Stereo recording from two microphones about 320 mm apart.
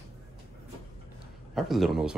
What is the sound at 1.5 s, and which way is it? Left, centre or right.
Speech, centre.